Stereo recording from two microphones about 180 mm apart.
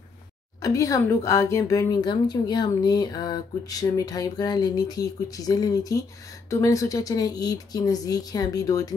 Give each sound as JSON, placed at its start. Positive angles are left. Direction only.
{"t": 0.6, "sound": "speech", "side_deg": 20}